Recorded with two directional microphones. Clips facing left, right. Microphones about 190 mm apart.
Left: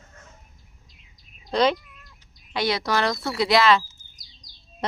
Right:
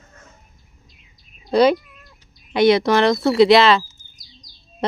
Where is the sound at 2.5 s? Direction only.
20° right (ahead or behind).